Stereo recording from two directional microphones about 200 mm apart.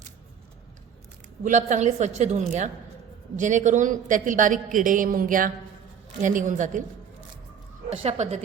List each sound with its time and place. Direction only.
1.5 s a woman's voice: 40° right (ahead or behind)
7.9 s a woman's voice: 30° right (ahead or behind)